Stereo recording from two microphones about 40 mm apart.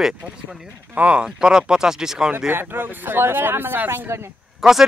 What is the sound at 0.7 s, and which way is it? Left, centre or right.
Speech, right.